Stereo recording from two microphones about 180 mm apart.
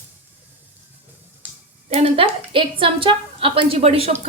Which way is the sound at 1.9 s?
30° right (ahead or behind).